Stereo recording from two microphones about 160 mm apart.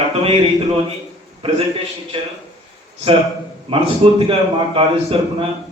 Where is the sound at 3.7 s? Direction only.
35° right (ahead or behind).